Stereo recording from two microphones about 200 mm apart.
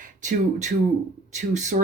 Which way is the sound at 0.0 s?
40° right (ahead or behind).